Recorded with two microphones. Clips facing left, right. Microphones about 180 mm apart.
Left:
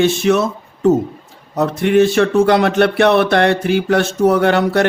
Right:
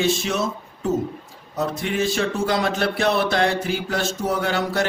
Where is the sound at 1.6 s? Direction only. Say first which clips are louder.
Left 11 dB; 65° left (ahead or behind).